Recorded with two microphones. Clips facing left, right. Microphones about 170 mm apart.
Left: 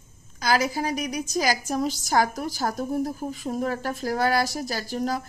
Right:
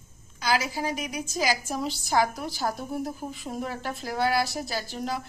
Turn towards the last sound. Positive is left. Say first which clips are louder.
# left 4 dB
turn(degrees=45)  # may be behind; listen again after turning